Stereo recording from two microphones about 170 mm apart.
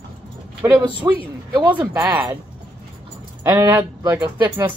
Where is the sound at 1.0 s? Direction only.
20° right (ahead or behind).